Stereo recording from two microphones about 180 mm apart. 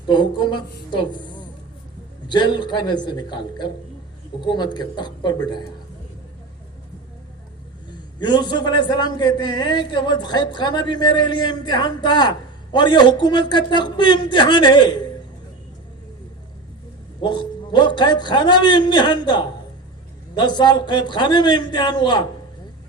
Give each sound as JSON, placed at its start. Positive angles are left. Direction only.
{"t": 0.1, "sound": "a man's voice", "side_deg": 25}
{"t": 2.2, "sound": "a man's voice", "side_deg": 25}
{"t": 8.2, "sound": "a man's voice", "side_deg": 25}
{"t": 17.2, "sound": "a man's voice", "side_deg": 25}